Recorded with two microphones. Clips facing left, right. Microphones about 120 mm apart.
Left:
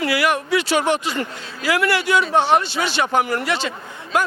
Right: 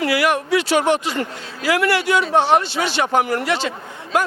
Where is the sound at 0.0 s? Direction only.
50° right (ahead or behind).